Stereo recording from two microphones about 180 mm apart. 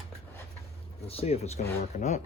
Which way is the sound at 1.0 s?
35° left (ahead or behind).